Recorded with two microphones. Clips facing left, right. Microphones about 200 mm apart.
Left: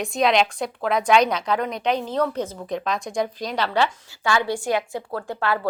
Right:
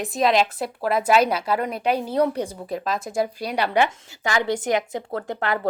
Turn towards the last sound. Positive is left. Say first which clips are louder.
# even
turn(degrees=-20)  # may be behind; listen again after turning